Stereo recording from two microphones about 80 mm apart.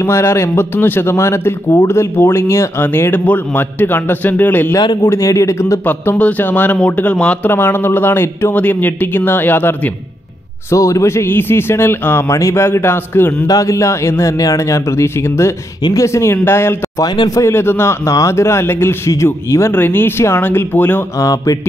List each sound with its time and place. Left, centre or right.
0.0 s a man's voice: left
5.0 s a man's voice: left
5.9 s a man's voice: centre
7.5 s a man's voice: left
10.7 s a man's voice: left
13.5 s a man's voice: left
17.0 s a man's voice: left
17.3 s a man's voice: left
21.2 s a sound: left